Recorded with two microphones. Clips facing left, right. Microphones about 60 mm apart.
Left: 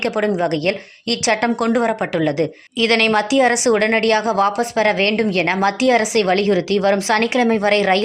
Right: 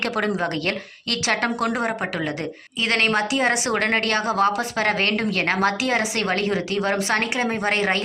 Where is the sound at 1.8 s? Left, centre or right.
Centre.